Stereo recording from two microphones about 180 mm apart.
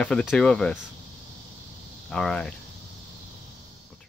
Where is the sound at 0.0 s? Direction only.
5° left (ahead or behind).